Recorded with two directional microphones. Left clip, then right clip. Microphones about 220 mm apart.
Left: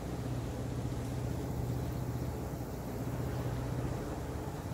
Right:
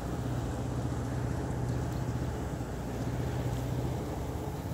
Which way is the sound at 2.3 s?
30° right (ahead or behind).